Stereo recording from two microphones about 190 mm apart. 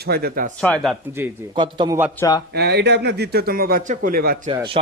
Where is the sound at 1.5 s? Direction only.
25° right (ahead or behind).